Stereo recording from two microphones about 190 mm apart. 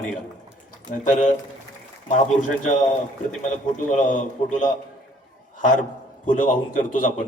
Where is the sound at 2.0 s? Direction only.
40° left (ahead or behind).